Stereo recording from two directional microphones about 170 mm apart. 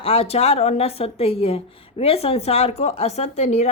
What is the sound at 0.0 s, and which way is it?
A woman's voice, 35° left (ahead or behind).